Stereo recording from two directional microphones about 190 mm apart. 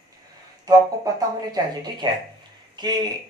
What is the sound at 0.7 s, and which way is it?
Speech, 20° right (ahead or behind).